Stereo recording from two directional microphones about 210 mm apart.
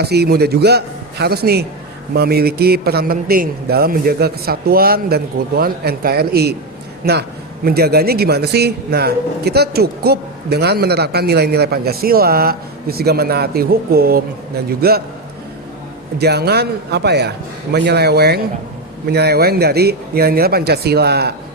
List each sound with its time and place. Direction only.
0.0 s a man's voice: 50° right (ahead or behind)
16.1 s a man's voice: 50° right (ahead or behind)